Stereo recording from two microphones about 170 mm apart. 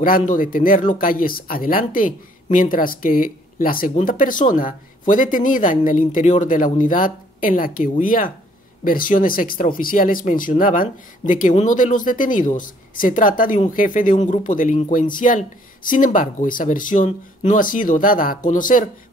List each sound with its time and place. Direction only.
0.0 s speech: 55° left (ahead or behind)